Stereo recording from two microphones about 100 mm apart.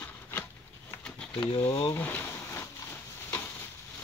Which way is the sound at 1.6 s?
50° left (ahead or behind).